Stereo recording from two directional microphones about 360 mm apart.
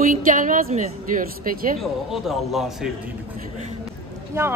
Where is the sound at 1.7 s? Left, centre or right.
Centre.